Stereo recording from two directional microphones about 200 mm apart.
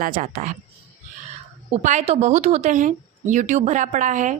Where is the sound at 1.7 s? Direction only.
35° right (ahead or behind).